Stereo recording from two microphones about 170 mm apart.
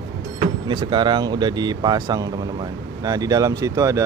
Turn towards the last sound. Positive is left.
turn(degrees=-20)  # may be behind; listen again after turning